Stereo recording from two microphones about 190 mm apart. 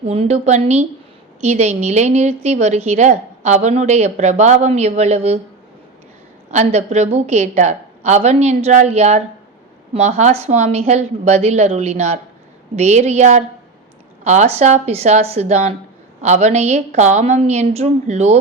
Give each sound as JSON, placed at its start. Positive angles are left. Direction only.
{"t": 0.1, "sound": "a woman's voice", "side_deg": -35}
{"t": 6.5, "sound": "a woman's voice", "side_deg": -35}